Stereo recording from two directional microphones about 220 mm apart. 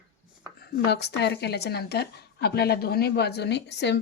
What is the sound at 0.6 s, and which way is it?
A woman's voice, 45° left (ahead or behind).